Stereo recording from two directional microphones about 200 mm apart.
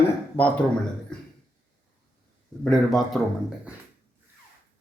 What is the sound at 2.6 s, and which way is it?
Speech, centre (ahead or behind).